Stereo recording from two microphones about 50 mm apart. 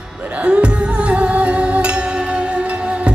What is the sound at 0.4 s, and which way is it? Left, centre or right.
Music, right.